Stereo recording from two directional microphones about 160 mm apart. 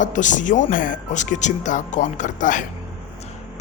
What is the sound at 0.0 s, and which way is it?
Speech, 50° left (ahead or behind).